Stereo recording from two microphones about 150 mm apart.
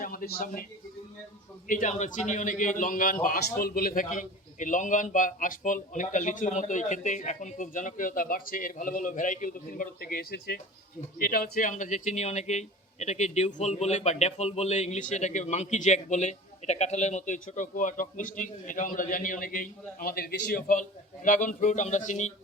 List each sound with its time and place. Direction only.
0.0 s a man's voice: 70° left (ahead or behind)
1.6 s a man's voice: 60° left (ahead or behind)
21.2 s a man's voice: 60° left (ahead or behind)